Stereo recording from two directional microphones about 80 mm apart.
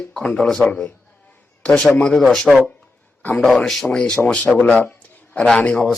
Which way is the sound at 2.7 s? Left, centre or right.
Centre.